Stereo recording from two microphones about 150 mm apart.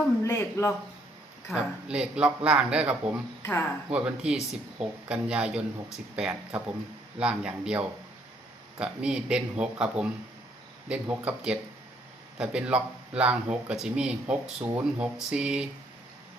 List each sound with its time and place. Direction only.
0.3 s a man's voice: 20° left (ahead or behind)
1.5 s speech: 5° right (ahead or behind)